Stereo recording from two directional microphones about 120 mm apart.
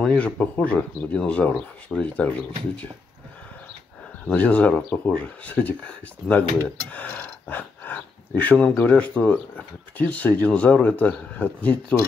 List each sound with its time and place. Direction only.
0.0 s speech: 10° left (ahead or behind)
4.3 s speech: 10° left (ahead or behind)